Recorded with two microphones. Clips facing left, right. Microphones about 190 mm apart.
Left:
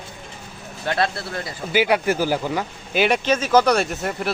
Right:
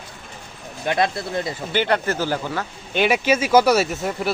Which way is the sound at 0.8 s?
15° right (ahead or behind).